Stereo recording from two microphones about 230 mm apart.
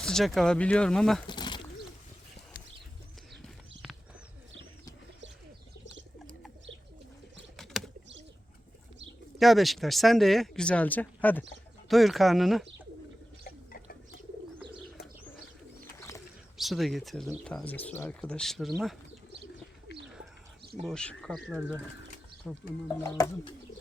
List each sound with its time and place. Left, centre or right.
0.0 s speech: centre
1.3 s bird: centre
7.5 s pigeon: centre
9.4 s speech: centre
13.4 s a sound: left
16.0 s bird: centre
16.6 s speech: centre
20.8 s speech: centre
23.0 s bird: centre